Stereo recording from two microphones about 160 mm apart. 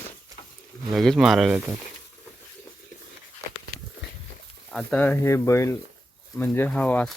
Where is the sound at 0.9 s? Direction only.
Centre (ahead or behind).